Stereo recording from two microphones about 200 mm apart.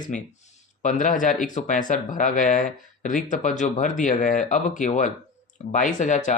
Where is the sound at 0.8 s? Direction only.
40° left (ahead or behind).